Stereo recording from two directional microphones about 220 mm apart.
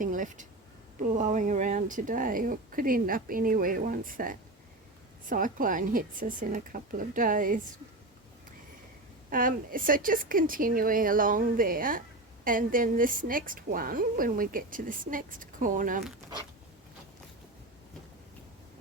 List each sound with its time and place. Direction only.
0.0 s a woman's voice: 35° right (ahead or behind)
9.3 s a woman's voice: 40° right (ahead or behind)